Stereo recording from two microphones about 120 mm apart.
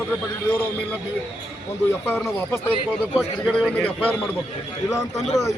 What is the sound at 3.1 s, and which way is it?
A man's voice, centre (ahead or behind).